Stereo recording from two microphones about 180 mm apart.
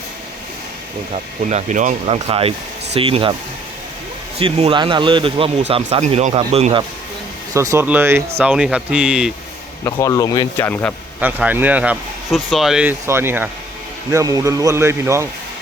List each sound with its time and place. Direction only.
1.4 s speech: 40° right (ahead or behind)
4.4 s speech: 35° right (ahead or behind)
7.5 s speech: 15° right (ahead or behind)
9.8 s speech: 20° left (ahead or behind)
11.2 s speech: 10° right (ahead or behind)